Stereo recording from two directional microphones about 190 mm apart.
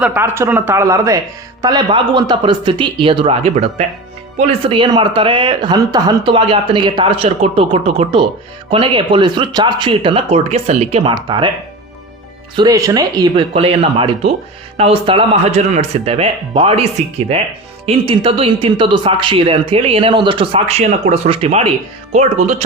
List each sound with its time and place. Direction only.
0.0 s speech: 10° right (ahead or behind); by 11.1 s 35° right (ahead or behind)
11.1 s speech: 25° right (ahead or behind)
12.5 s speech: 20° right (ahead or behind)
17.8 s speech: 30° right (ahead or behind)